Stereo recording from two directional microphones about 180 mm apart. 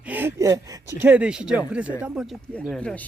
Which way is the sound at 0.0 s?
10° right (ahead or behind).